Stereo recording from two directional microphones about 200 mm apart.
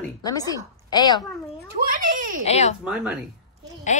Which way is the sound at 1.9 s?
45° right (ahead or behind).